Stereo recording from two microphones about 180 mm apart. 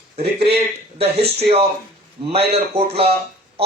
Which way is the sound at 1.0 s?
65° right (ahead or behind).